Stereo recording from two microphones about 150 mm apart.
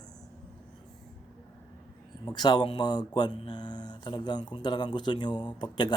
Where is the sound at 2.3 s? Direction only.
30° left (ahead or behind).